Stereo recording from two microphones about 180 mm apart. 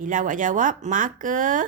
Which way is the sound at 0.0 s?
45° right (ahead or behind).